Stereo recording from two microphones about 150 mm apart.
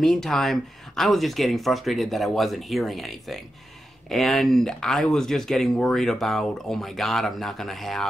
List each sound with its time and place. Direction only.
0.0 s speech: 5° left (ahead or behind)